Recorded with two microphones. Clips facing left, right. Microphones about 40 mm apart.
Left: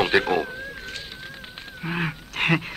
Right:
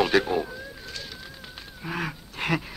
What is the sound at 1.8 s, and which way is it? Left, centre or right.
Speech, left.